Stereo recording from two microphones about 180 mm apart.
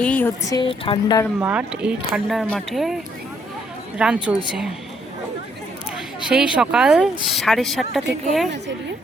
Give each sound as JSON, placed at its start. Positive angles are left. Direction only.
{"t": 0.0, "sound": "speech", "side_deg": 10}
{"t": 1.4, "sound": "speech", "side_deg": -5}
{"t": 6.2, "sound": "speech", "side_deg": -5}